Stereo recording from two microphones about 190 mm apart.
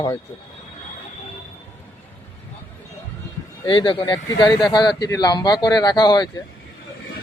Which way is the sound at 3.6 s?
25° left (ahead or behind).